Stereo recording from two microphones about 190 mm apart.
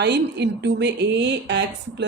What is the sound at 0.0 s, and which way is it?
Speech, 65° right (ahead or behind).